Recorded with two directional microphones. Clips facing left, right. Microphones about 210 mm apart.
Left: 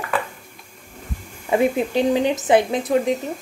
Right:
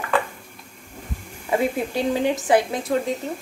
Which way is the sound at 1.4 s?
20° left (ahead or behind).